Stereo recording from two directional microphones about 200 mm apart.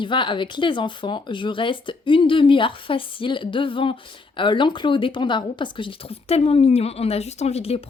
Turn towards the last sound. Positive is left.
turn(degrees=30)  # may be behind; listen again after turning